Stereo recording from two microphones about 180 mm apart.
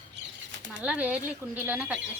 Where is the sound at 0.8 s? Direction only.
5° right (ahead or behind).